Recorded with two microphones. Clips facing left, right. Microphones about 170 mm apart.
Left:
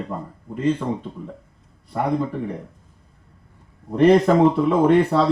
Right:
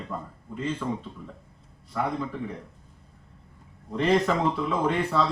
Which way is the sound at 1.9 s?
40° left (ahead or behind).